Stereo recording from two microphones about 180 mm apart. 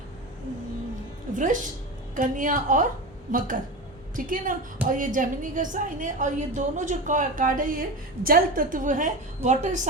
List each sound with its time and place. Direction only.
1.3 s a woman's voice: 45° right (ahead or behind)